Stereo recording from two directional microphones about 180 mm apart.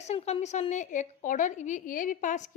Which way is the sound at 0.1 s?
35° left (ahead or behind).